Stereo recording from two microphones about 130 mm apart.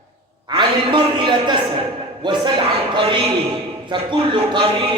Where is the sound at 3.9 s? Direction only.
35° right (ahead or behind).